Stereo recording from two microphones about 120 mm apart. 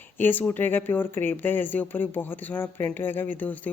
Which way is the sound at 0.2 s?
15° left (ahead or behind).